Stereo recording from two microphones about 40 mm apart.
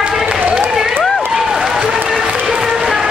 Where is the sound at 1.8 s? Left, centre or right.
Right.